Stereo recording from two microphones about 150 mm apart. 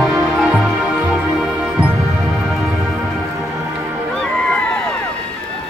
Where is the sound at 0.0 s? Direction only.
Centre (ahead or behind).